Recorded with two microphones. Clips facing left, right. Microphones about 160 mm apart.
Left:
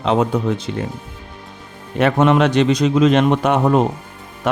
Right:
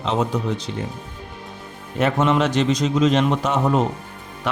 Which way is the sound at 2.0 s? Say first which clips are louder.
Left 4 dB; 60° left (ahead or behind).